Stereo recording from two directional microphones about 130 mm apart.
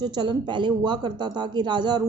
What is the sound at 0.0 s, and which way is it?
A woman's voice, 35° right (ahead or behind).